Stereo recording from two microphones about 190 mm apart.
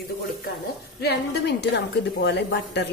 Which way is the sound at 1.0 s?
60° left (ahead or behind).